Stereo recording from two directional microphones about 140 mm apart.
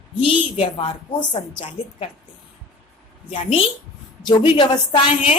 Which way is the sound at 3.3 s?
40° left (ahead or behind).